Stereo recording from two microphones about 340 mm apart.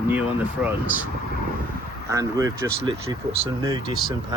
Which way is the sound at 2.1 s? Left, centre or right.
Centre.